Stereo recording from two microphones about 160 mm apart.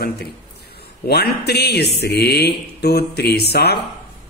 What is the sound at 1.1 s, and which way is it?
Speech, 90° left.